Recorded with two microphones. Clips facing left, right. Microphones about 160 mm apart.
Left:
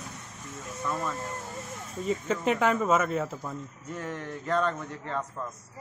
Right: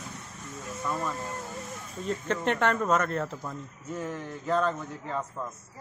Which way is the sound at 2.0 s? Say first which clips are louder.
Left 1 dB; 5° left (ahead or behind).